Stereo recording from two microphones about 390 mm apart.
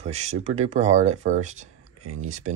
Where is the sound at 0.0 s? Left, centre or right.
Centre.